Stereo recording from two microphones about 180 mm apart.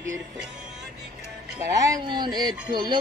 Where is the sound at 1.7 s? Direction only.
20° right (ahead or behind).